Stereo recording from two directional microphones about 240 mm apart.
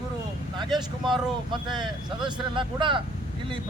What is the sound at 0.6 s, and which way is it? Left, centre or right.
Vehicle, centre.